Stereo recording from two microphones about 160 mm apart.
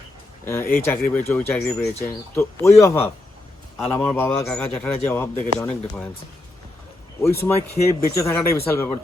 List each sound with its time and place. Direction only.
0.4 s a man's voice: 15° left (ahead or behind)
7.2 s a man's voice: 15° left (ahead or behind)